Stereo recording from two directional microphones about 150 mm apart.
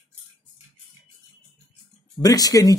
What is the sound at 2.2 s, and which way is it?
Speech, 25° left (ahead or behind).